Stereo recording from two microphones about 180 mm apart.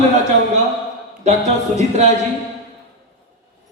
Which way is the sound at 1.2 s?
40° right (ahead or behind).